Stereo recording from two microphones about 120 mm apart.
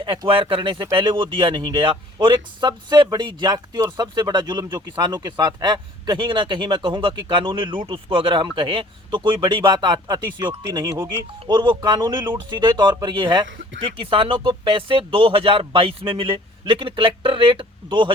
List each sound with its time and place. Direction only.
0.0 s speech: 45° right (ahead or behind)
13.9 s speech: 50° right (ahead or behind)